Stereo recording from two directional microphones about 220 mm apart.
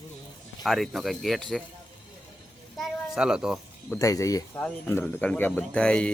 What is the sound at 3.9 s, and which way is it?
Speech, 15° left (ahead or behind).